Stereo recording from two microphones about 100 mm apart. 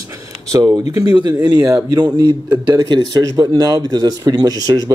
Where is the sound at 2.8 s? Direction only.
45° right (ahead or behind).